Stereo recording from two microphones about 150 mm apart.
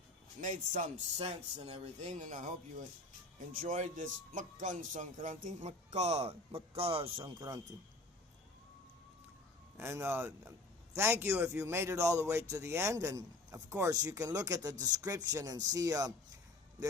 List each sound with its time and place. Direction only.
0.4 s a man's voice: 55° right (ahead or behind)
1.6 s speech: 45° right (ahead or behind); by 7.6 s 30° right (ahead or behind)
9.7 s a man's voice: 15° right (ahead or behind)